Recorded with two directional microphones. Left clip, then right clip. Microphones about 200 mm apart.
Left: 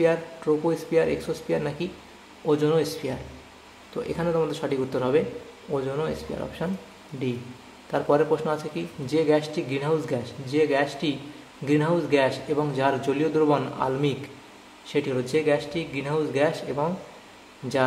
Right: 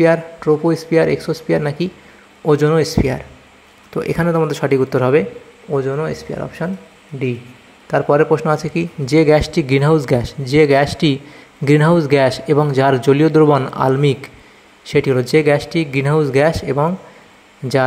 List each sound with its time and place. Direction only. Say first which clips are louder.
0.0 s a man's voice: right 9 dB; 35° right (ahead or behind)
7.9 s speech: right 9 dB; 30° right (ahead or behind)